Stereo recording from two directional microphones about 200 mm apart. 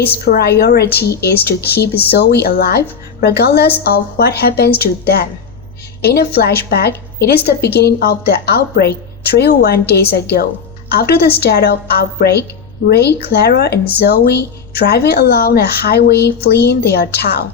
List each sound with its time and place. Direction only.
0.3 s a woman's voice: 55° left (ahead or behind)